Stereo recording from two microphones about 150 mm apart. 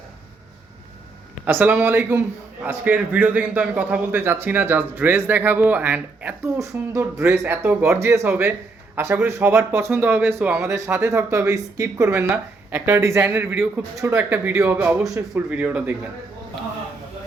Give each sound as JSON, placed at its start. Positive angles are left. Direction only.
{"t": 1.5, "sound": "speech", "side_deg": -10}